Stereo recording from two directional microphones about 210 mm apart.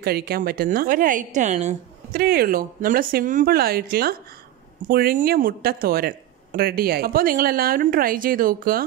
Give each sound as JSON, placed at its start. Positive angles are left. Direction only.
{"t": 0.0, "sound": "a woman's voice", "side_deg": -45}